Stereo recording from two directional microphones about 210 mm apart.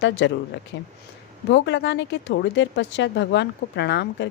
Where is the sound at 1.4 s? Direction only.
55° left (ahead or behind).